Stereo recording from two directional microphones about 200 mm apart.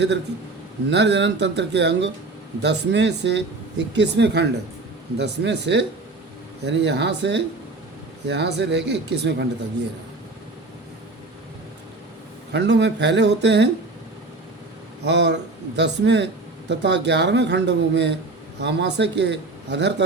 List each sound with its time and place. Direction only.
0.9 s speech: 60° right (ahead or behind)
12.5 s speech: 60° right (ahead or behind)
15.0 s speech: 60° right (ahead or behind)